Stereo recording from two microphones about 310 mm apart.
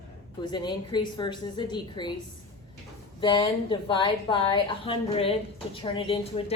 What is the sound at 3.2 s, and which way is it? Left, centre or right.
A woman's voice, centre.